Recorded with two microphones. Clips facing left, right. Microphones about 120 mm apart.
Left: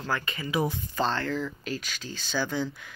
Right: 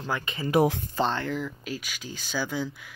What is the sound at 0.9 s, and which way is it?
Speech, 20° right (ahead or behind).